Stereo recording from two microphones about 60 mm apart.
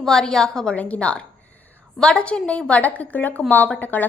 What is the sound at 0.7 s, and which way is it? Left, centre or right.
A woman's voice, left.